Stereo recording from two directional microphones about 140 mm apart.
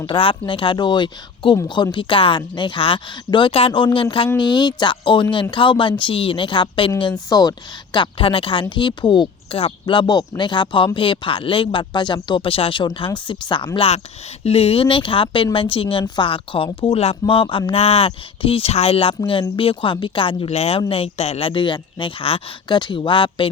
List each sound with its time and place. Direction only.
0.0 s speech: 35° left (ahead or behind)